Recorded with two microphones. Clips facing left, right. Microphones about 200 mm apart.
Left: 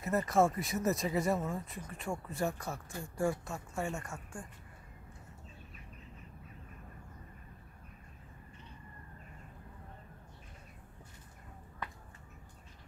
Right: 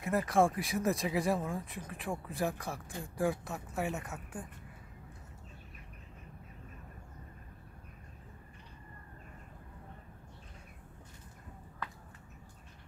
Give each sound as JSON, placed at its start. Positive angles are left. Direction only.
{"t": 0.0, "sound": "speech", "side_deg": 0}